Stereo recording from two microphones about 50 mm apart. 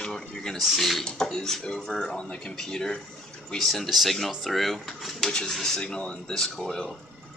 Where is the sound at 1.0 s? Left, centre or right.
Centre.